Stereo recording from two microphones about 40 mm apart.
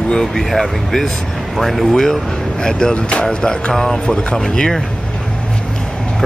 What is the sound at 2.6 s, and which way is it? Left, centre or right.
Speech, centre.